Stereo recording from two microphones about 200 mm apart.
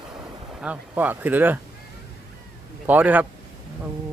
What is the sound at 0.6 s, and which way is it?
Speech, 10° right (ahead or behind).